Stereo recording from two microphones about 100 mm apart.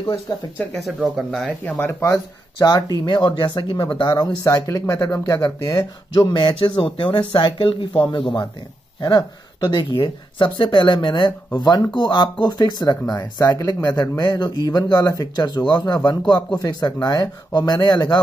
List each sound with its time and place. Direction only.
0.3 s speech: 40° left (ahead or behind)
0.7 s speech: centre (ahead or behind)
1.6 s speech: 20° left (ahead or behind); by 8.5 s 50° left (ahead or behind)
9.7 s speech: 55° left (ahead or behind)